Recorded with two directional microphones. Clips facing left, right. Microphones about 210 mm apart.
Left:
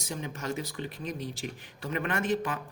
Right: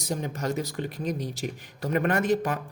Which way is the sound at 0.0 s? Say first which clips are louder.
Right 6 dB; 40° right (ahead or behind).